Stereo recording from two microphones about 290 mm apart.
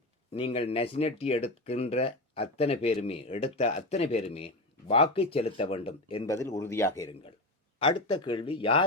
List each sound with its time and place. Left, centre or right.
0.3 s speech: centre